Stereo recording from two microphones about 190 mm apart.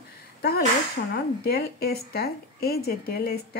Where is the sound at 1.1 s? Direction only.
55° left (ahead or behind).